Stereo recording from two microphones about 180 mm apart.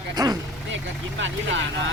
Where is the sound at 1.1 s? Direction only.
90° right.